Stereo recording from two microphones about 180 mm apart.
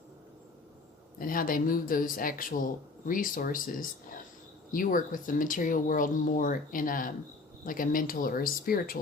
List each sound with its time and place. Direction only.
1.2 s speech: 50° left (ahead or behind)